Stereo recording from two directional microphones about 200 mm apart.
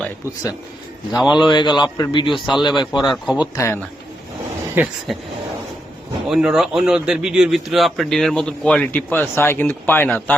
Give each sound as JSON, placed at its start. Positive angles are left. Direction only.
{"t": 1.3, "sound": "a man's voice", "side_deg": 20}
{"t": 2.5, "sound": "a man's voice", "side_deg": 0}
{"t": 3.5, "sound": "speech", "side_deg": 15}
{"t": 4.7, "sound": "speech", "side_deg": -10}
{"t": 6.2, "sound": "a man's voice", "side_deg": 0}